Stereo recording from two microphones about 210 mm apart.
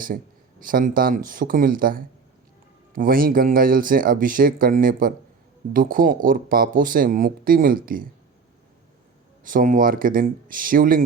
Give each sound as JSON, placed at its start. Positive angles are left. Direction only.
{"t": 0.6, "sound": "speech", "side_deg": -40}
{"t": 9.4, "sound": "speech", "side_deg": -40}